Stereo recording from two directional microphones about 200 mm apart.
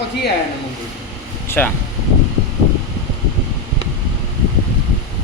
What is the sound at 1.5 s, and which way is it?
Speech, 10° left (ahead or behind).